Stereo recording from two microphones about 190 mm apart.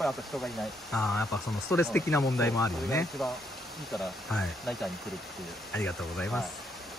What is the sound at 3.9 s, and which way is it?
Speech, centre (ahead or behind).